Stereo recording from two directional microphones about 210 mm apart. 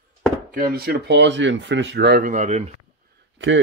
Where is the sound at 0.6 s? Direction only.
45° right (ahead or behind).